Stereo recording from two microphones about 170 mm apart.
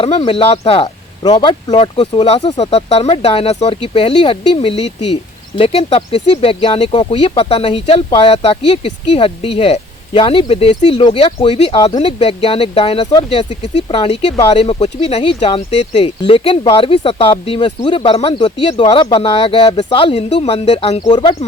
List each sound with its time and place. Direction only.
0.0 s speech: 30° left (ahead or behind)